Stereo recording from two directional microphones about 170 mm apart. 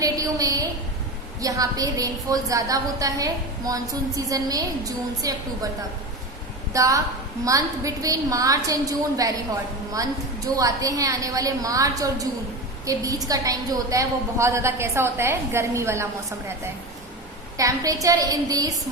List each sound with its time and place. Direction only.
0.0 s a sound: 20° right (ahead or behind)
1.4 s a woman's voice: 20° right (ahead or behind)
6.7 s a woman's voice: 20° right (ahead or behind)
17.6 s a woman's voice: 20° right (ahead or behind)